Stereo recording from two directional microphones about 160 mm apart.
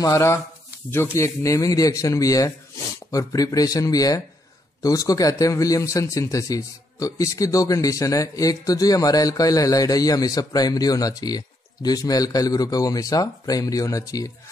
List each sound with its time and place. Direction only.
0.0 s speech: 20° left (ahead or behind)